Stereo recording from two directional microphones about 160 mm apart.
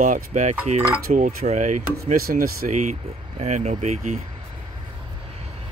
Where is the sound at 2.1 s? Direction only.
65° right (ahead or behind).